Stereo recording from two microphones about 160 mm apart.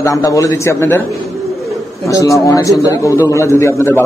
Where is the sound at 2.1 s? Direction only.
20° left (ahead or behind).